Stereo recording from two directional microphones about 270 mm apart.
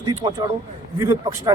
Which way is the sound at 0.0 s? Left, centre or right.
Centre.